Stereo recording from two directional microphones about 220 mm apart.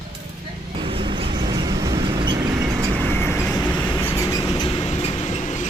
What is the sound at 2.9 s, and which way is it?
Vehicle, 10° left (ahead or behind).